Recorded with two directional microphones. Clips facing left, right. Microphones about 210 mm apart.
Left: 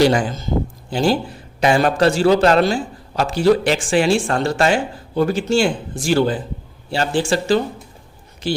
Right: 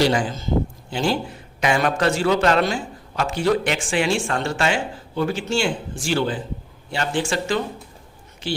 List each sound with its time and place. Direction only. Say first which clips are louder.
0.9 s a man's voice: left 5 dB; 40° left (ahead or behind)